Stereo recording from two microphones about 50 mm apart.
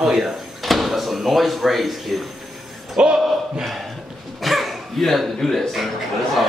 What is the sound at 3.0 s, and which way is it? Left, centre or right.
Speech, right.